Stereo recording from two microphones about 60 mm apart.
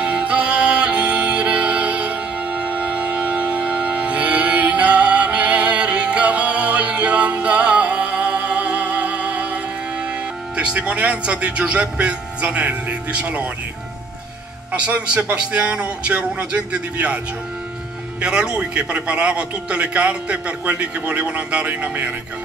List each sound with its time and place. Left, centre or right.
0.0 s music: centre
15.3 s a man's voice: centre
18.2 s a man's voice: centre